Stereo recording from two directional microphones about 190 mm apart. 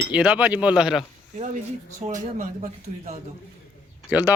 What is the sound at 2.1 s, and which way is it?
Speech, 40° right (ahead or behind).